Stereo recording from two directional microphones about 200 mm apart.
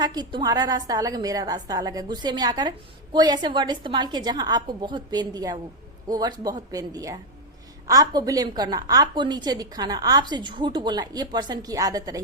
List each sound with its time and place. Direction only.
0.0 s a woman's voice: 20° right (ahead or behind)